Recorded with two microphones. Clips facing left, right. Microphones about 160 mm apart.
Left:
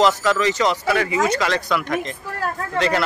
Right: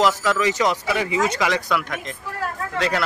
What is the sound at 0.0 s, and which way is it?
Speech, 5° right (ahead or behind).